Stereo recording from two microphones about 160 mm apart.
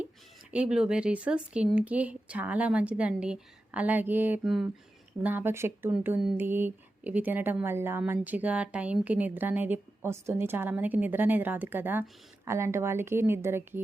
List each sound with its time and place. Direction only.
0.5 s speech: 5° right (ahead or behind)